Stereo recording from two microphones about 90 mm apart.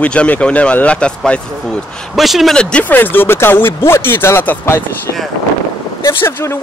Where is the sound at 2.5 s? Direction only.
15° left (ahead or behind).